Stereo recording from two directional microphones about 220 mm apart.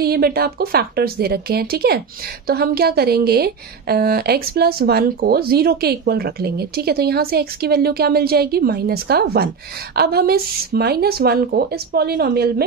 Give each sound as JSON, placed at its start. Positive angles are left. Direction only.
{"t": 0.0, "sound": "a woman's voice", "side_deg": -45}